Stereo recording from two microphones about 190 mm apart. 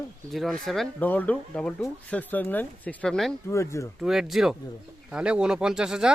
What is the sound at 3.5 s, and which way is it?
Speech, 15° left (ahead or behind).